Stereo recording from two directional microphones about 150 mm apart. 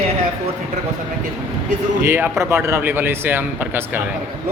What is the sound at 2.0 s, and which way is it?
Speech, 15° right (ahead or behind).